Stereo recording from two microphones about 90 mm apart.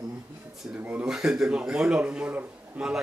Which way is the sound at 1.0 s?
5° right (ahead or behind).